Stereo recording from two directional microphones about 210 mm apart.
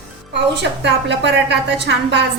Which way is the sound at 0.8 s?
55° right (ahead or behind).